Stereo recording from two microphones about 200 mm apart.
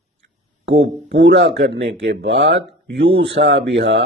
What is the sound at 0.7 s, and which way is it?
Speech, 60° right (ahead or behind).